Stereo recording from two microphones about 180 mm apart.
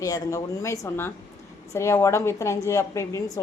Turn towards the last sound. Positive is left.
turn(degrees=15)  # may be behind; listen again after turning